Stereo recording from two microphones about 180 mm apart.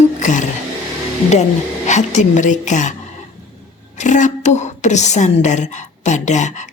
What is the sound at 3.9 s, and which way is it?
A woman's voice, 40° left (ahead or behind).